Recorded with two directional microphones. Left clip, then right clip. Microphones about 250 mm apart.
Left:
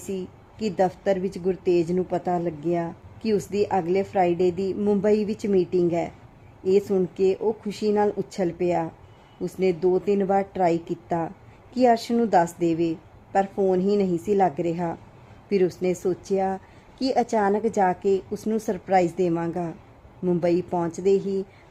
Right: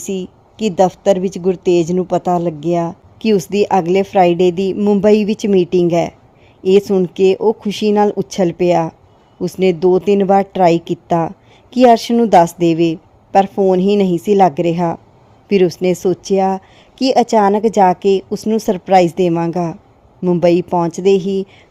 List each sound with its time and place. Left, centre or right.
0.6 s a woman's voice: right